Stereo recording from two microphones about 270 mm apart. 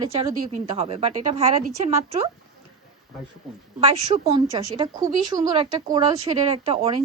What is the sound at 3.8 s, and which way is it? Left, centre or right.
Speech, right.